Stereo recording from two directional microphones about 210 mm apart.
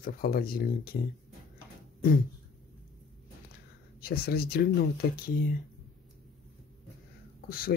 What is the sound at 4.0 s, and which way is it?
Speech, 45° left (ahead or behind).